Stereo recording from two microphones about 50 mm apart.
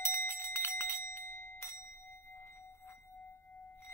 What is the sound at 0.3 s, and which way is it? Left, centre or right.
Bell, left.